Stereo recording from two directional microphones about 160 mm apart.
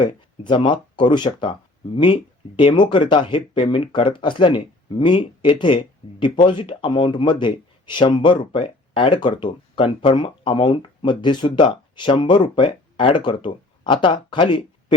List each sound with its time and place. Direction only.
0.0 s speech: 30° left (ahead or behind)
2.6 s speech: 30° left (ahead or behind)